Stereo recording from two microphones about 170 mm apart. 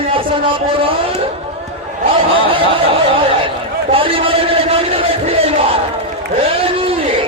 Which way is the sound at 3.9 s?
35° right (ahead or behind).